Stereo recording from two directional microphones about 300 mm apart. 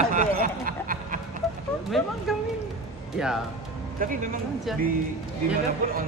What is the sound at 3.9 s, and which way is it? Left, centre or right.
Speech, right.